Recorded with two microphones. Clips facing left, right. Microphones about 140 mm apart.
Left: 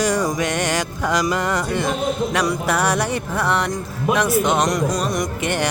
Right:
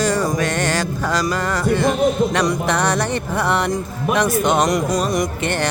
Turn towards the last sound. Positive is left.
turn(degrees=0)  # may be behind; listen again after turning